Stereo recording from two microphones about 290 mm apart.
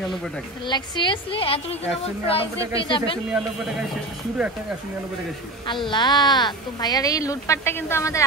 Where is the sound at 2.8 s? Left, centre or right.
Centre.